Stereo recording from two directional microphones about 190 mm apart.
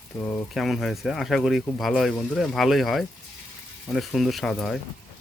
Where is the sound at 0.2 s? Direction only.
5° left (ahead or behind).